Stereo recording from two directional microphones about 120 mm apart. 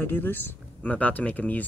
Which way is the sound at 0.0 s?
15° left (ahead or behind).